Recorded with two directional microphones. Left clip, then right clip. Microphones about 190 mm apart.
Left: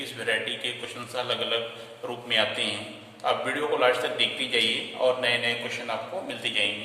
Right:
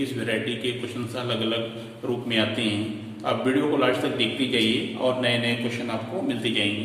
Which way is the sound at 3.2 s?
25° left (ahead or behind).